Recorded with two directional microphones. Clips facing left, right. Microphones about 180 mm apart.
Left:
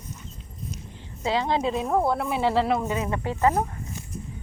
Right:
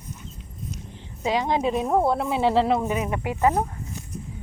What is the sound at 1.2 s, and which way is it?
Speech, 15° right (ahead or behind).